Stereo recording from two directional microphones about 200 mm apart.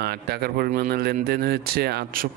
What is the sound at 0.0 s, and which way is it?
Speech, 55° right (ahead or behind).